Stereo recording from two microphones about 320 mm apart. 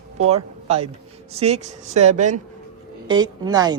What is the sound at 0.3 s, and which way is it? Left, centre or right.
A woman's voice, centre.